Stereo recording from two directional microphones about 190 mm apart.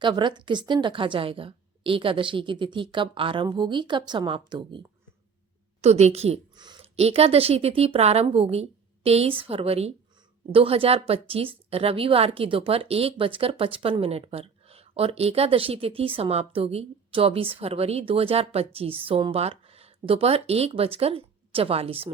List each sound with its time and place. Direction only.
0.0 s a woman's voice: 25° right (ahead or behind)
5.8 s a woman's voice: 35° right (ahead or behind)